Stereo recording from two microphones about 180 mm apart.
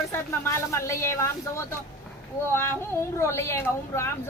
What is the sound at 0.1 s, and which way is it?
Speech, 15° left (ahead or behind).